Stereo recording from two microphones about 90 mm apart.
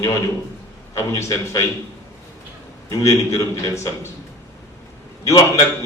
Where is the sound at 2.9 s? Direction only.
35° left (ahead or behind).